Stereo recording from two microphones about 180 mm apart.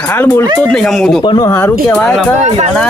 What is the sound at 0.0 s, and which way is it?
Speech, 10° left (ahead or behind).